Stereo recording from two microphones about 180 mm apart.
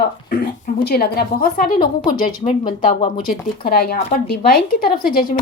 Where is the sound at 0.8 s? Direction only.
60° left (ahead or behind).